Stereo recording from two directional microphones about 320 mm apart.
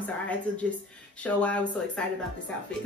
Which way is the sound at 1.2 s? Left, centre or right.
Centre.